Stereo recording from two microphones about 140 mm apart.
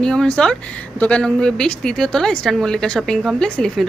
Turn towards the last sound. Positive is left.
turn(degrees=5)  # may be behind; listen again after turning